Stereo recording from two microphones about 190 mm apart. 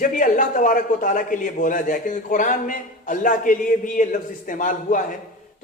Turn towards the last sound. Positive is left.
turn(degrees=45)  # may be behind; listen again after turning